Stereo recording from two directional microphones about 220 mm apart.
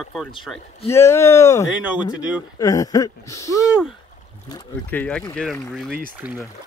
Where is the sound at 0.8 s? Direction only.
10° left (ahead or behind).